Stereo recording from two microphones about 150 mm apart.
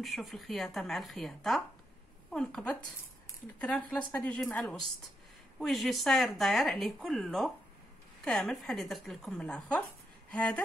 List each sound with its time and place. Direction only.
0.0 s a woman's voice: centre (ahead or behind)